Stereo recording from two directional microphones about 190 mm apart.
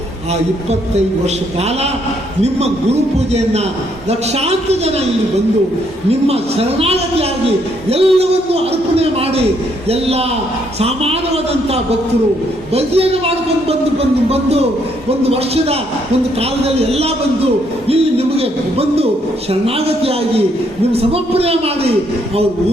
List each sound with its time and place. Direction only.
2.4 s a man's voice: 35° right (ahead or behind)
6.1 s a man's voice: 30° right (ahead or behind)
12.7 s a man's voice: 30° right (ahead or behind)